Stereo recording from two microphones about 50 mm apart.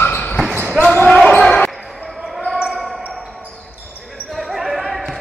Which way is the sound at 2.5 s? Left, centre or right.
Right.